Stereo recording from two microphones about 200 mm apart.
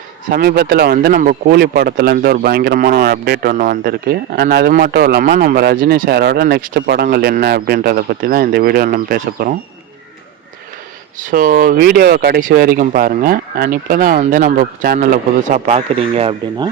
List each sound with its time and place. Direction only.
0.3 s speech: 50° right (ahead or behind)
11.3 s speech: 45° right (ahead or behind); by 16.6 s 30° right (ahead or behind)